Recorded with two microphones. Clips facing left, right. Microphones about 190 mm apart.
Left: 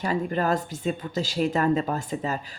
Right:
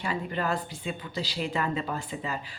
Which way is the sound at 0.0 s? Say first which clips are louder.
Left 5 dB; 40° left (ahead or behind).